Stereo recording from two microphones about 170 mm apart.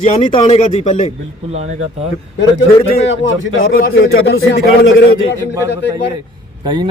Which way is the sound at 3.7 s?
70° left (ahead or behind).